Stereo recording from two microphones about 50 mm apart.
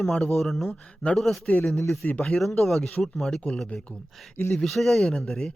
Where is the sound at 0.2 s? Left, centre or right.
Centre.